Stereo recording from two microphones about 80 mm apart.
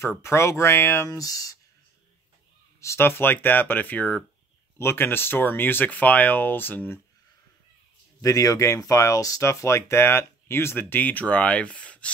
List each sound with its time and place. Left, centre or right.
0.0 s speech: left
1.0 s speech: left
2.8 s speech: left
8.2 s speech: left; by 12.1 s centre